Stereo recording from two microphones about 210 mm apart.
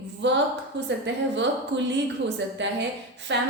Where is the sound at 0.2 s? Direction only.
55° right (ahead or behind).